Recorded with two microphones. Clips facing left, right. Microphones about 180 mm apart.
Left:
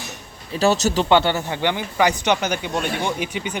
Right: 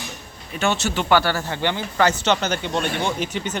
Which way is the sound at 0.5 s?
35° left (ahead or behind).